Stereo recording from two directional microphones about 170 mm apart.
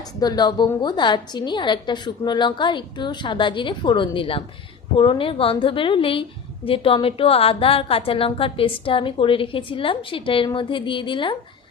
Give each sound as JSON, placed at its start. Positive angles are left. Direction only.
{"t": 0.2, "sound": "a woman's voice", "side_deg": 25}